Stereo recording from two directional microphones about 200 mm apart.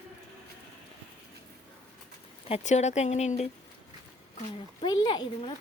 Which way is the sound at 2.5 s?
35° left (ahead or behind).